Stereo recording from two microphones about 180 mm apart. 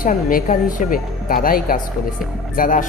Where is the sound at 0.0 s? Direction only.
50° left (ahead or behind).